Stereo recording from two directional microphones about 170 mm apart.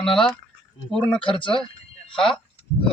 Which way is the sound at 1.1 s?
30° left (ahead or behind).